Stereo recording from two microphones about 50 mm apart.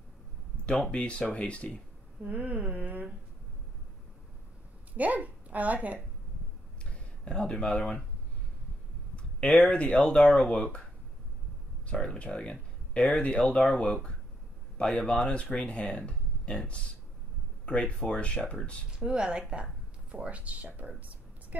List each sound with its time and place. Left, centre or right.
0.9 s speech: left
2.2 s humming: right
4.9 s a woman's voice: right
6.8 s a sound: left
9.1 s speech: centre
11.9 s speech: centre
14.8 s speech: centre
18.9 s speech: centre
19.5 s a sound: right
20.2 s speech: right